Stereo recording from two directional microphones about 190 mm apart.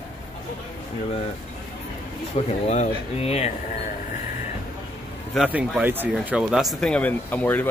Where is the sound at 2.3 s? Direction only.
35° left (ahead or behind).